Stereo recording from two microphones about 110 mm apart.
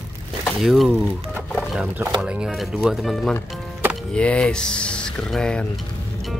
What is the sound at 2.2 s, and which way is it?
Speech, 5° right (ahead or behind).